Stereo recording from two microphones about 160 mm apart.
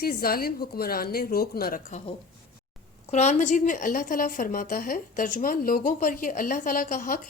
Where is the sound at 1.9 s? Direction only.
45° left (ahead or behind).